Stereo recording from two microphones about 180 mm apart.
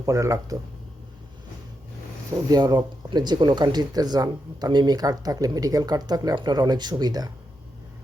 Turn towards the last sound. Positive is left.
turn(degrees=-20)  # may be behind; listen again after turning